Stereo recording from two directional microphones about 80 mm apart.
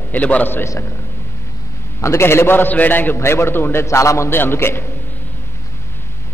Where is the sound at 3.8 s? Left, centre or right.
Left.